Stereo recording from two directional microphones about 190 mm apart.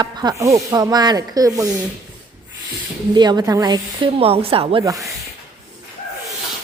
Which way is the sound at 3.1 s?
20° right (ahead or behind).